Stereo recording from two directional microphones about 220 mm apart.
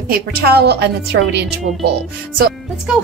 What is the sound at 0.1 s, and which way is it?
A woman's voice, 45° right (ahead or behind).